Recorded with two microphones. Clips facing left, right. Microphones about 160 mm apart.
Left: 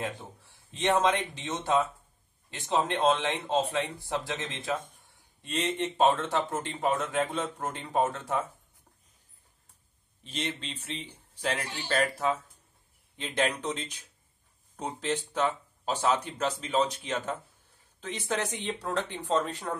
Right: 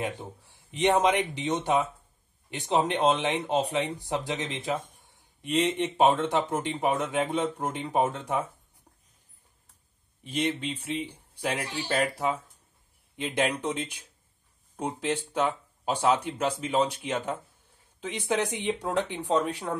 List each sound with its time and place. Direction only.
0.0 s speech: 15° right (ahead or behind)
10.2 s speech: 10° right (ahead or behind)